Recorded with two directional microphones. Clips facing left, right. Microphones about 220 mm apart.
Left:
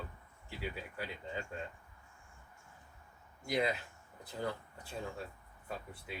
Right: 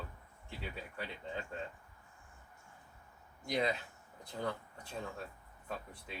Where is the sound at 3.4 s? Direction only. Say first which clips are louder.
Left 1 dB; 5° left (ahead or behind).